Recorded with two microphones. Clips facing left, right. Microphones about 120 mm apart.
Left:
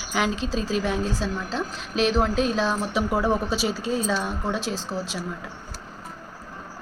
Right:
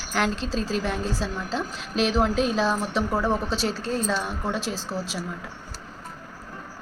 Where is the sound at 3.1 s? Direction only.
10° left (ahead or behind).